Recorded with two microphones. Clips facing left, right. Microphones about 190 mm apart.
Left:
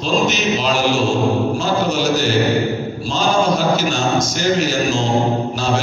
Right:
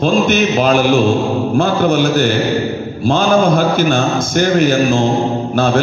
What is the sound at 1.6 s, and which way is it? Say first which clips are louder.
A man's voice: right 5 dB; 55° right (ahead or behind).